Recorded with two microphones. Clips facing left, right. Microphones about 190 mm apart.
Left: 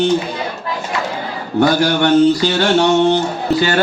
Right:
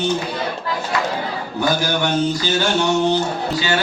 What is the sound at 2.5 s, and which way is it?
Mantra, 70° left (ahead or behind).